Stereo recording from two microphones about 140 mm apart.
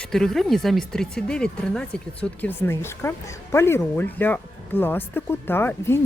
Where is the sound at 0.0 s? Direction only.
5° left (ahead or behind).